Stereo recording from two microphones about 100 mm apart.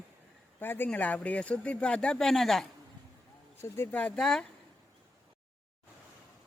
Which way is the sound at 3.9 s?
15° left (ahead or behind).